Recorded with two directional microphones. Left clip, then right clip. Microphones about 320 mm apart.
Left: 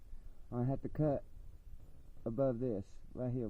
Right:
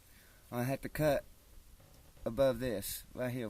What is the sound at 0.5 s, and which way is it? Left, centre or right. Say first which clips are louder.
Speech: right 3 dB; centre.